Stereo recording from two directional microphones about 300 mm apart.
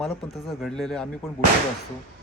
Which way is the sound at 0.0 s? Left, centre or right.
Centre.